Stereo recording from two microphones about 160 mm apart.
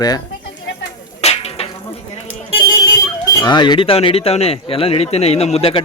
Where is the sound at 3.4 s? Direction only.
25° left (ahead or behind).